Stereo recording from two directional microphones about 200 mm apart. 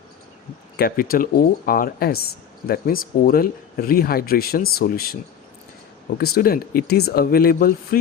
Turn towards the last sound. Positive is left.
turn(degrees=50)  # may be behind; listen again after turning